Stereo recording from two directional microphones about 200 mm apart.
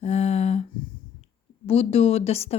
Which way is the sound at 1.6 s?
30° left (ahead or behind).